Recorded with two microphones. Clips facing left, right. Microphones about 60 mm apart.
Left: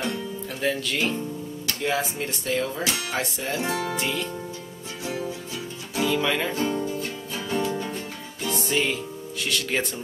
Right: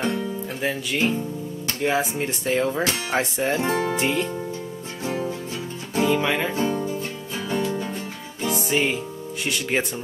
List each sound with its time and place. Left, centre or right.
0.0 s music: centre
1.7 s speech: right
5.0 s music: right
6.2 s music: centre
7.3 s music: centre
8.5 s music: centre